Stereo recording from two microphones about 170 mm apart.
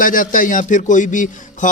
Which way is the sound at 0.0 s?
55° left (ahead or behind).